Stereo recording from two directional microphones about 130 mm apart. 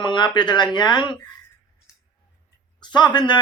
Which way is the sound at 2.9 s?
35° left (ahead or behind).